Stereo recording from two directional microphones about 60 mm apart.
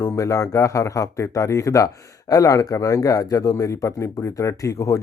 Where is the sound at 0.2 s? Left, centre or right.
Left.